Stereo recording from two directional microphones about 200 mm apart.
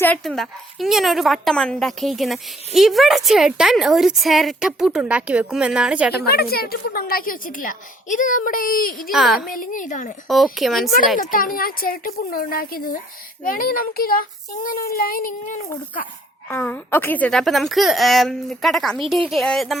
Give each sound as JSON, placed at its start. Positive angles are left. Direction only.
{"t": 0.0, "sound": "a woman's voice", "side_deg": 5}
{"t": 6.1, "sound": "a woman's voice", "side_deg": 50}
{"t": 9.1, "sound": "a woman's voice", "side_deg": 0}
{"t": 9.5, "sound": "a woman's voice", "side_deg": 40}
{"t": 10.2, "sound": "a woman's voice", "side_deg": 0}
{"t": 11.2, "sound": "a woman's voice", "side_deg": 45}
{"t": 16.5, "sound": "a woman's voice", "side_deg": 10}